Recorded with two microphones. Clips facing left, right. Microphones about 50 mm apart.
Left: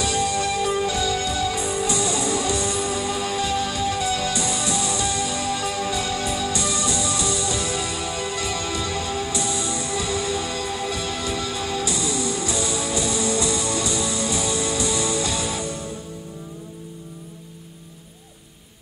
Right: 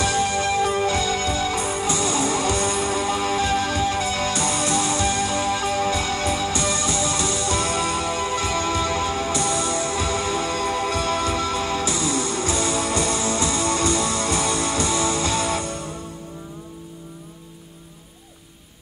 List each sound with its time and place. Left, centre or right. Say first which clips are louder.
0.0 s music: right 1 dB; right